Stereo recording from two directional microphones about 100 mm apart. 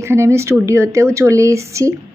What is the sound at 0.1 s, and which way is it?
Speech, 30° right (ahead or behind).